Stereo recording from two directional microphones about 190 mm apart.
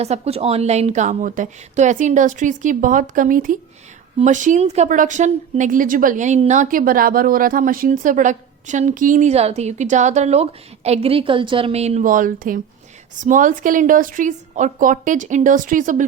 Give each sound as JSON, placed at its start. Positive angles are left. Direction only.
{"t": 0.0, "sound": "a woman's voice", "side_deg": -35}